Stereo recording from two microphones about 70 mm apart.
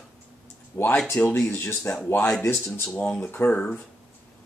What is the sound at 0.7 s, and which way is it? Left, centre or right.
Speech, left.